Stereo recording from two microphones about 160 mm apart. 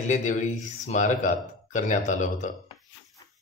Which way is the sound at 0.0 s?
50° left (ahead or behind).